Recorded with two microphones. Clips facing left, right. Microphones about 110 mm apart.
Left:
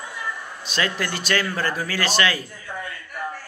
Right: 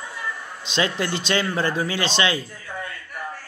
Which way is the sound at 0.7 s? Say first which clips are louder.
Right 2 dB; 25° right (ahead or behind).